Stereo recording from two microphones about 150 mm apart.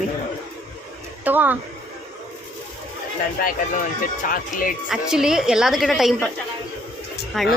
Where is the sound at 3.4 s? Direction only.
70° left (ahead or behind).